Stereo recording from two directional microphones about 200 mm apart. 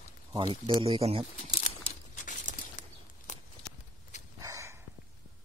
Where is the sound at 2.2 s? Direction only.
40° left (ahead or behind).